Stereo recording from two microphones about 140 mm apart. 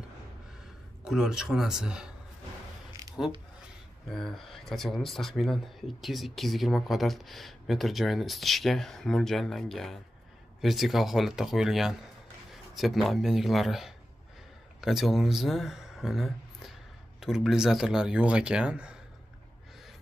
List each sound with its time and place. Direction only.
1.0 s speech: 5° right (ahead or behind)
3.0 s a sound: 25° right (ahead or behind)
4.1 s speech: centre (ahead or behind)